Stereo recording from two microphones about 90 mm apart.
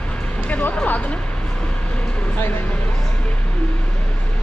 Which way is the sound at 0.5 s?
15° left (ahead or behind).